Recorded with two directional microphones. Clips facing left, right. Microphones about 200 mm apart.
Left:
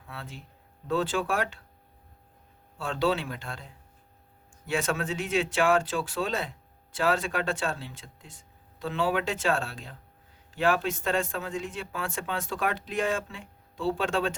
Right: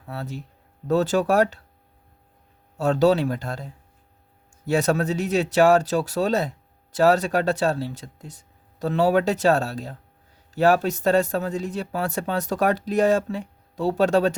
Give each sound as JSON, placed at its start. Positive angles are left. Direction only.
{"t": 0.0, "sound": "speech", "side_deg": -40}
{"t": 2.7, "sound": "speech", "side_deg": -40}